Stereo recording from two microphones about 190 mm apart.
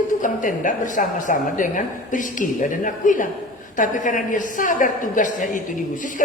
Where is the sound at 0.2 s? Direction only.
45° left (ahead or behind).